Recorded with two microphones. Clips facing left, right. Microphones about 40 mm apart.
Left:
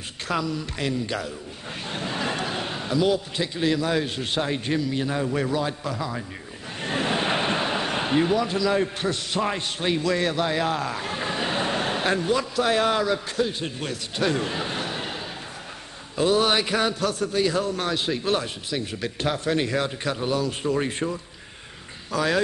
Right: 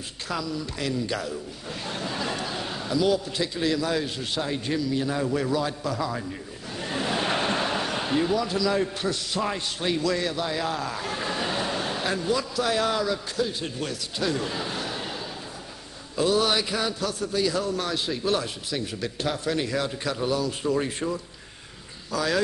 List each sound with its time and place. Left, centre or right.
0.3 s speech: left
0.8 s a man's voice: left
6.8 s a sound: left
9.0 s a man's voice: left
16.2 s speech: left
17.4 s speech: left
22.1 s speech: left